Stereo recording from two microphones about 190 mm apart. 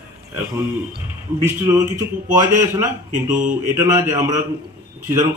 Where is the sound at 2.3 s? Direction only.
15° right (ahead or behind).